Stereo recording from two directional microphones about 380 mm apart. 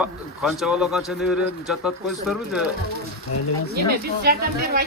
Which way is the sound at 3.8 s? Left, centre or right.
Right.